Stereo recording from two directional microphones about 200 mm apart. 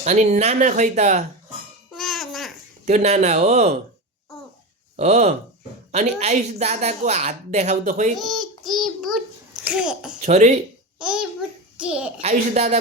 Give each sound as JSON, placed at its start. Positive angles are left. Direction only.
{"t": 0.0, "sound": "speech", "side_deg": -35}
{"t": 1.9, "sound": "music", "side_deg": 0}
{"t": 2.8, "sound": "speech", "side_deg": -35}
{"t": 4.9, "sound": "speech", "side_deg": -35}
{"t": 8.1, "sound": "a child's voice", "side_deg": 0}
{"t": 10.2, "sound": "speech", "side_deg": -35}
{"t": 10.9, "sound": "a child's voice", "side_deg": -5}
{"t": 12.2, "sound": "speech", "side_deg": -35}